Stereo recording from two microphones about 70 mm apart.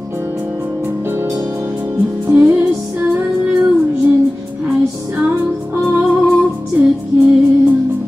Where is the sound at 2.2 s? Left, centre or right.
Right.